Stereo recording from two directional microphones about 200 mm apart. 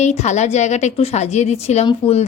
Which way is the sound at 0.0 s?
35° left (ahead or behind).